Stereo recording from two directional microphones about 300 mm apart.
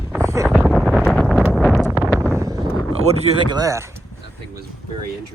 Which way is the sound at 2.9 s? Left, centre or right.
Right.